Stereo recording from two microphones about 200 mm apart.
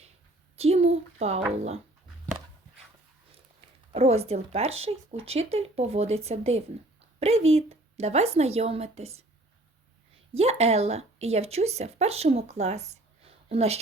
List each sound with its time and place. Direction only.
0.5 s a sound: 30° right (ahead or behind)
3.9 s speech: 30° right (ahead or behind)
10.3 s speech: 30° right (ahead or behind)